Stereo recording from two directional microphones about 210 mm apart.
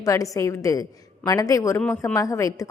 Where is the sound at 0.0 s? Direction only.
15° left (ahead or behind).